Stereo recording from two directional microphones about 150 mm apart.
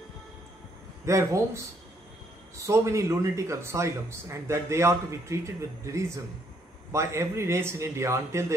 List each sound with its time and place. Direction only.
1.0 s speech: 20° right (ahead or behind)